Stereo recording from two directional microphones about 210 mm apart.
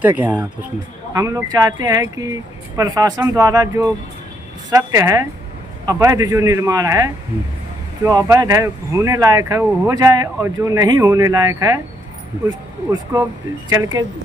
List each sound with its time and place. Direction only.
0.0 s speech: 5° right (ahead or behind)